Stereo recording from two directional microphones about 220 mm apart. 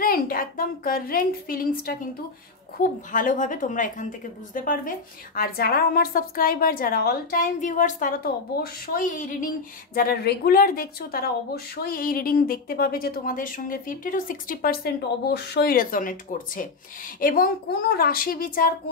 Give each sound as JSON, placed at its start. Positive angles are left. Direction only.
{"t": 0.0, "sound": "a woman's voice", "side_deg": 40}
{"t": 3.1, "sound": "speech", "side_deg": 35}